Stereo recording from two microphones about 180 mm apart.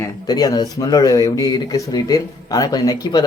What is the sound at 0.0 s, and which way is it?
Speech, 20° left (ahead or behind).